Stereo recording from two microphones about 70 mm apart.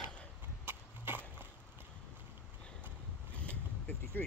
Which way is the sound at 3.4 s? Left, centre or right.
Left.